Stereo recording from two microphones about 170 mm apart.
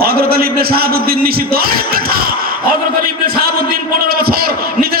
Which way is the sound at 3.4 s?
60° right (ahead or behind).